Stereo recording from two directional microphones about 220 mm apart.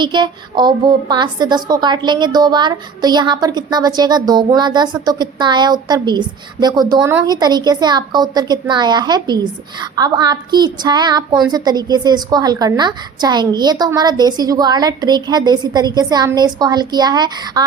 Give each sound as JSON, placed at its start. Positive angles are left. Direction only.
{"t": 0.0, "sound": "a woman's voice", "side_deg": -20}